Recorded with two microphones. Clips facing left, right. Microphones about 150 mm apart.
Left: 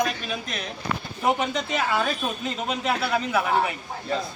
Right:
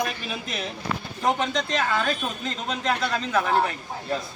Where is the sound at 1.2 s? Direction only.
10° left (ahead or behind).